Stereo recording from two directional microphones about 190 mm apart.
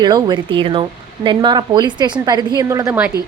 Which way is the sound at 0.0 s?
20° right (ahead or behind).